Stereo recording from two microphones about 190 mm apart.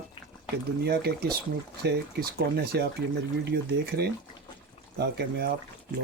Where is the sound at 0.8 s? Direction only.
55° right (ahead or behind).